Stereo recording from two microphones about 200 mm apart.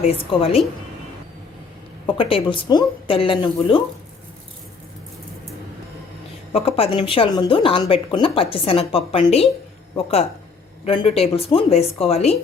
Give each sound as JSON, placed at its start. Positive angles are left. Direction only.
{"t": 0.0, "sound": "speech", "side_deg": 30}
{"t": 2.0, "sound": "speech", "side_deg": 25}
{"t": 6.5, "sound": "speech", "side_deg": 30}